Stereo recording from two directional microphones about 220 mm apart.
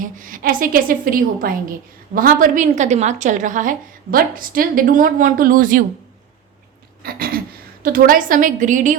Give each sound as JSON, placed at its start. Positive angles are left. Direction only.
{"t": 0.0, "sound": "a woman's voice", "side_deg": -40}
{"t": 7.0, "sound": "a woman's voice", "side_deg": -40}